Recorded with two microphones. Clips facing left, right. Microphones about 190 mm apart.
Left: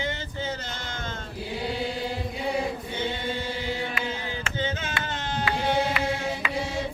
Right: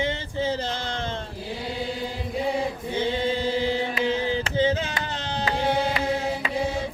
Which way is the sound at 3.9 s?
30° right (ahead or behind).